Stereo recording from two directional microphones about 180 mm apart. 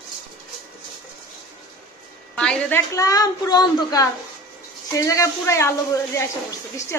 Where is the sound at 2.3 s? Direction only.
5° left (ahead or behind).